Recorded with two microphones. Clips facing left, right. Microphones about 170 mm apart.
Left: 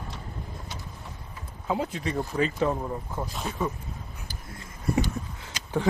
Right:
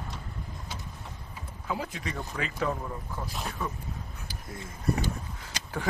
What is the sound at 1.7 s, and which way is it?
Speech, 30° left (ahead or behind).